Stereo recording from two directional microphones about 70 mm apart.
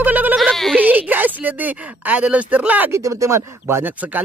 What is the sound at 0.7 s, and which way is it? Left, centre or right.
Speech, right.